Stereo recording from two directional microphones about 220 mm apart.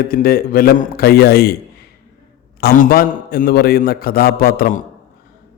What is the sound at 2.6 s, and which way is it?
Speech, 45° left (ahead or behind).